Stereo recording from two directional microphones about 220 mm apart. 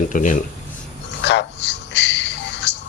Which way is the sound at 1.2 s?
50° left (ahead or behind).